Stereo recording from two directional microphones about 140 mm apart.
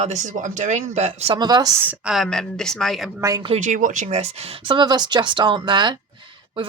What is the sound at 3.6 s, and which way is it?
Speech, 60° right (ahead or behind).